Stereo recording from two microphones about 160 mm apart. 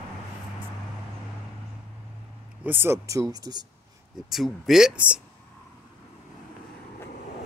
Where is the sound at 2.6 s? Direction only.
15° right (ahead or behind).